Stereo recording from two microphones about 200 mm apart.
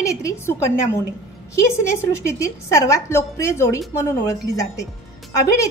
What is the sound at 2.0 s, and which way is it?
A woman's voice, 15° left (ahead or behind).